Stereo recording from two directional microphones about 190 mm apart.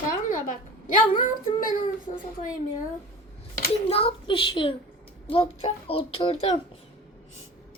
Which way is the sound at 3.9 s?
30° left (ahead or behind).